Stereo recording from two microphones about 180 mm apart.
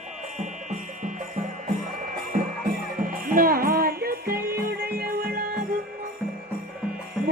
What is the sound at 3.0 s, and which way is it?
Music, 50° right (ahead or behind).